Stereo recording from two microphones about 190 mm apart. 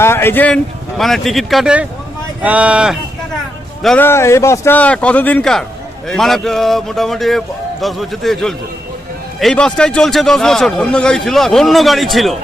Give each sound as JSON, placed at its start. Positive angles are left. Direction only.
{"t": 0.0, "sound": "a man's voice", "side_deg": 10}
{"t": 3.8, "sound": "a man's voice", "side_deg": 10}